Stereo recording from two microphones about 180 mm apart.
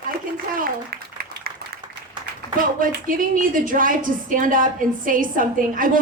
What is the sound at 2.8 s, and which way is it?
A woman's voice, 50° right (ahead or behind).